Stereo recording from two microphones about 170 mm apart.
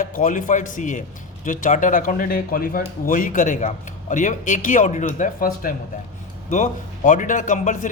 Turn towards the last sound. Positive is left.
turn(degrees=50)  # may be behind; listen again after turning